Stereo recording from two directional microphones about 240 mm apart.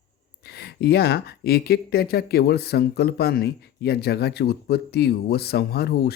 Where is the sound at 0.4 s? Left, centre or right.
Left.